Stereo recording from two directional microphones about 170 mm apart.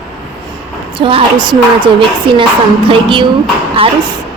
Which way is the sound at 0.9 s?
30° right (ahead or behind).